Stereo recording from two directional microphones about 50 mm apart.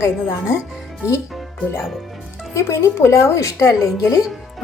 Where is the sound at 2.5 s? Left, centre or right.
Left.